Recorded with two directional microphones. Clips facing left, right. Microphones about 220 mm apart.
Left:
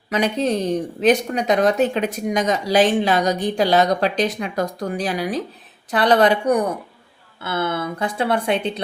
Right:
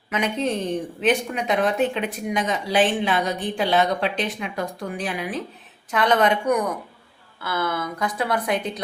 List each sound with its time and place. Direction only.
0.1 s speech: 35° left (ahead or behind)